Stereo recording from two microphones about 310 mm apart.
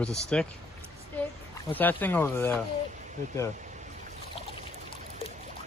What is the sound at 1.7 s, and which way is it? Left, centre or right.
Speech, centre.